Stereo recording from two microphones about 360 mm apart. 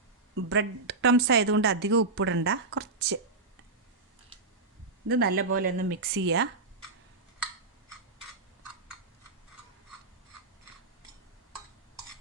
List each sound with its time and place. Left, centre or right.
0.4 s speech: right
5.0 s speech: right